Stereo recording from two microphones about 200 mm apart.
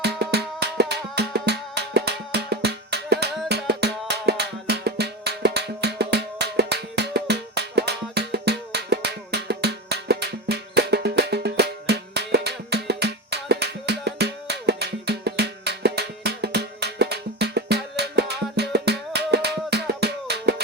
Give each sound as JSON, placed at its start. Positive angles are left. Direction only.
{"t": 0.0, "sound": "music", "side_deg": -55}